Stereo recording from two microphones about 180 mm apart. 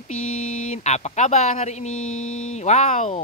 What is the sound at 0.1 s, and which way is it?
Speech, 40° left (ahead or behind).